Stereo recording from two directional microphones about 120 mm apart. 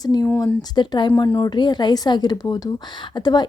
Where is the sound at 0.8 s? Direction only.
40° left (ahead or behind).